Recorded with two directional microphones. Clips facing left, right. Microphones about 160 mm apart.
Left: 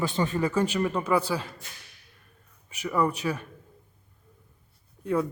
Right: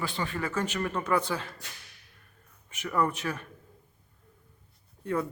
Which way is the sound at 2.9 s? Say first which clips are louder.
Left 3 dB; 10° left (ahead or behind).